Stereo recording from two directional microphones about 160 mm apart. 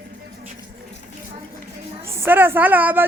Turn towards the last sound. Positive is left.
turn(degrees=-10)  # may be behind; listen again after turning